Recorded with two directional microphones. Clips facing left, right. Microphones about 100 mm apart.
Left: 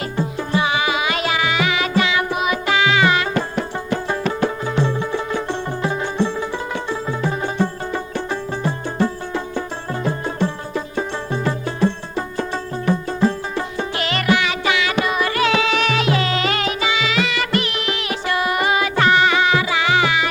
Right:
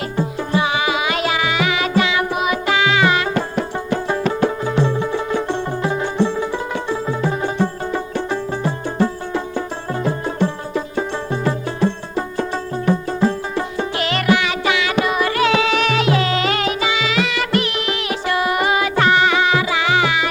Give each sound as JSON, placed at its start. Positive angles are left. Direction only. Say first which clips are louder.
{"t": 0.2, "sound": "music", "louder": "right 1 dB", "side_deg": -10}
{"t": 5.8, "sound": "music", "louder": "right 1 dB", "side_deg": -20}
{"t": 7.1, "sound": "music", "louder": "right 1 dB", "side_deg": -25}